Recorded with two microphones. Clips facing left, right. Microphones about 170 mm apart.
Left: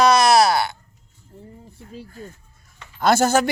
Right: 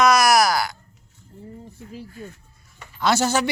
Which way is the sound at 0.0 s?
30° left (ahead or behind).